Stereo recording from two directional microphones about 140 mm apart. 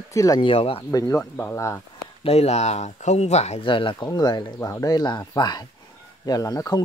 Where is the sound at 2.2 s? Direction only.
50° left (ahead or behind); by 6.8 s 25° left (ahead or behind).